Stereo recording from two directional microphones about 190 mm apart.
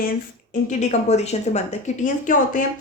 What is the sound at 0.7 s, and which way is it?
A woman's voice, 35° left (ahead or behind).